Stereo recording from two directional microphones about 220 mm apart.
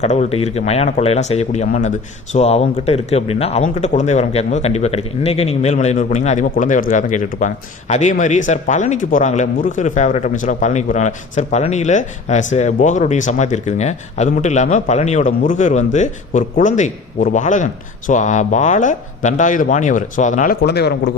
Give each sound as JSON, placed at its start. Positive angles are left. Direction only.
{"t": 0.0, "sound": "speech", "side_deg": 30}
{"t": 20.6, "sound": "a man's voice", "side_deg": 50}